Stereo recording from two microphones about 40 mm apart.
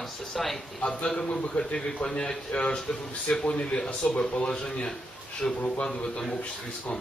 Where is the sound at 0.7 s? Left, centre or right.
Left.